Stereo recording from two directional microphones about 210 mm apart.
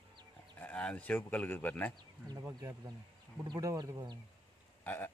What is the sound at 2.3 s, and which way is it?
Speech, 15° right (ahead or behind).